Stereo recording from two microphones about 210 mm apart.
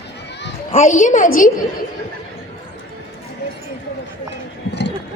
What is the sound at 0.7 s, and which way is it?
Speech, 35° left (ahead or behind).